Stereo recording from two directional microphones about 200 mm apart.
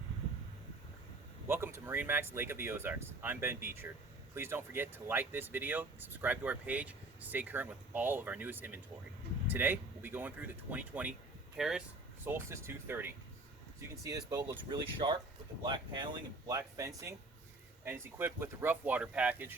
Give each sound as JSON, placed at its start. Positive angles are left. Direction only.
{"t": 1.5, "sound": "speech", "side_deg": -10}